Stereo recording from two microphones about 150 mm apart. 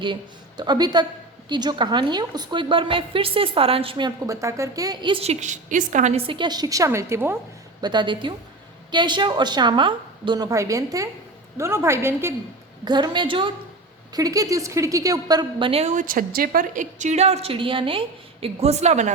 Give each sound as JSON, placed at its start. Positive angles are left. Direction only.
{"t": 0.0, "sound": "a woman's voice", "side_deg": -30}
{"t": 5.1, "sound": "a woman's voice", "side_deg": -45}
{"t": 6.2, "sound": "a woman's voice", "side_deg": -30}
{"t": 7.8, "sound": "a woman's voice", "side_deg": -30}
{"t": 12.8, "sound": "a woman's voice", "side_deg": -30}
{"t": 14.1, "sound": "a woman's voice", "side_deg": -25}